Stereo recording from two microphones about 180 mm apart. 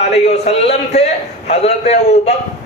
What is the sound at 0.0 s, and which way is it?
A man's voice, 35° left (ahead or behind).